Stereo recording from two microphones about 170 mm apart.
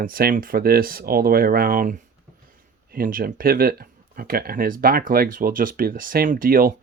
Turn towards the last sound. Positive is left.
turn(degrees=-55)  # may be behind; listen again after turning